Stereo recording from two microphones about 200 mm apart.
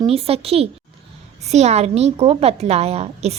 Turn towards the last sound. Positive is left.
turn(degrees=-30)  # may be behind; listen again after turning